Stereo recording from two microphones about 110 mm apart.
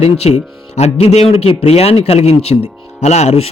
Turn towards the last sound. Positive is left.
turn(degrees=70)  # may be behind; listen again after turning